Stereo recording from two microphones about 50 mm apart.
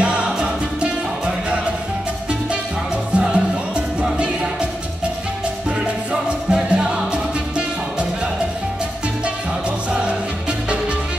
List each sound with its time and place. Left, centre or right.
0.0 s music: right
3.2 s music: centre
6.2 s music: centre